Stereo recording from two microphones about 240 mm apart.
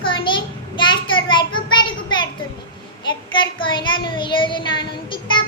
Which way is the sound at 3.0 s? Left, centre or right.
Centre.